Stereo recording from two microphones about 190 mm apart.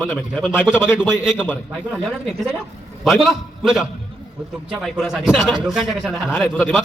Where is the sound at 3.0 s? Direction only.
Centre (ahead or behind).